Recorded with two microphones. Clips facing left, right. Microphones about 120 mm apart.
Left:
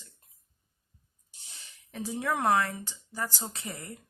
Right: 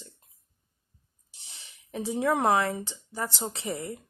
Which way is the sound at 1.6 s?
25° right (ahead or behind).